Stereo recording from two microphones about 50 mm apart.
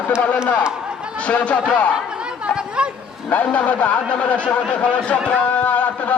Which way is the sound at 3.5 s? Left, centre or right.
Left.